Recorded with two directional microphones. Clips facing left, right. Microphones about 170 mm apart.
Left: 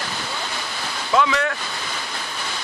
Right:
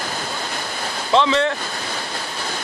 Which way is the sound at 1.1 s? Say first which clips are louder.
Right 3 dB; 30° right (ahead or behind).